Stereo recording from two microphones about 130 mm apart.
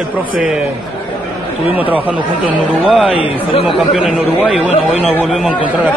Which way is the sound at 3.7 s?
5° right (ahead or behind).